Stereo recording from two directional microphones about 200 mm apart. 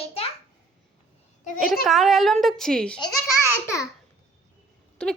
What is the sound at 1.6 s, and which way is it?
A woman's voice, centre (ahead or behind).